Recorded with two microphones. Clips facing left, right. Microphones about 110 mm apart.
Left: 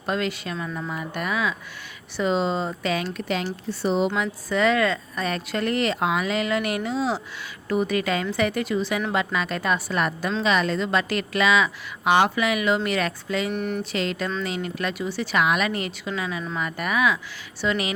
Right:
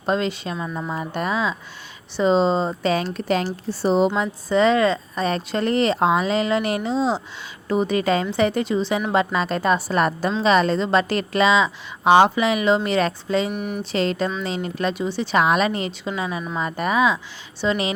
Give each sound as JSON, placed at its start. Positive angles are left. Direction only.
{"t": 0.0, "sound": "speech", "side_deg": -25}
{"t": 9.1, "sound": "a woman's voice", "side_deg": -35}
{"t": 13.5, "sound": "speech", "side_deg": -15}
{"t": 13.9, "sound": "a woman's voice", "side_deg": -35}